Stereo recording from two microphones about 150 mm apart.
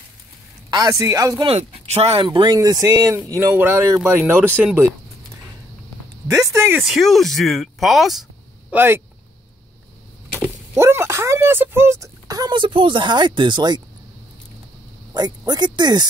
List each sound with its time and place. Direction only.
0.7 s speech: 25° right (ahead or behind)
1.4 s speech: 40° right (ahead or behind)
2.2 s speech: 30° right (ahead or behind); by 4.7 s 5° right (ahead or behind)
6.2 s speech: 20° right (ahead or behind)
6.8 s speech: centre (ahead or behind)
8.7 s speech: 15° right (ahead or behind)
10.3 s speech: 15° right (ahead or behind)
15.1 s speech: 25° right (ahead or behind)